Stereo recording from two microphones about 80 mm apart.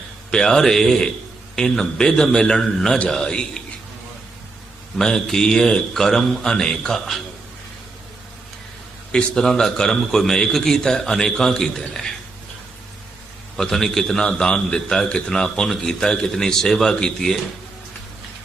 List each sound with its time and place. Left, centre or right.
0.3 s a man's voice: centre
4.9 s a man's voice: centre
9.1 s a man's voice: centre
13.6 s a man's voice: centre